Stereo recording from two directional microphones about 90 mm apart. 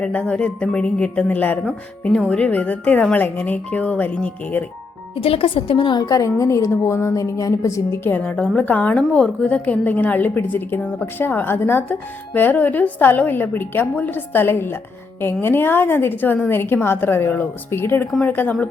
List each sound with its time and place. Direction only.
0.0 s speech: 15° left (ahead or behind)
5.2 s a woman's voice: 90° left; by 6.0 s 70° left (ahead or behind)
6.0 s a woman's voice: 40° left (ahead or behind)
8.1 s a woman's voice: 15° left (ahead or behind)